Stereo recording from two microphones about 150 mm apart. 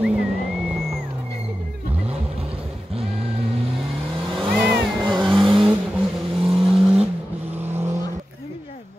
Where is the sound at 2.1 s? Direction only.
40° right (ahead or behind).